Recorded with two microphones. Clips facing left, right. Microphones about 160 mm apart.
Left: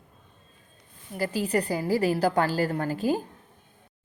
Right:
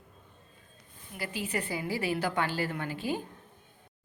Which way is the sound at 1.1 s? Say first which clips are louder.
Left 8 dB; 40° left (ahead or behind).